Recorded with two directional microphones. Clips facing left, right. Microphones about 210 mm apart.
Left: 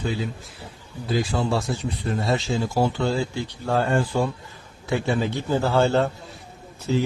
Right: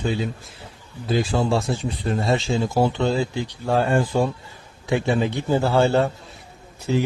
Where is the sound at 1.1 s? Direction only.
25° right (ahead or behind).